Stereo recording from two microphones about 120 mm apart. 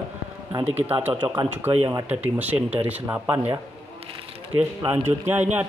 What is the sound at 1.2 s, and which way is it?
Speech, 40° right (ahead or behind).